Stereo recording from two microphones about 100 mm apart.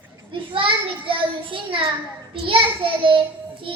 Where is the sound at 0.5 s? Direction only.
60° right (ahead or behind).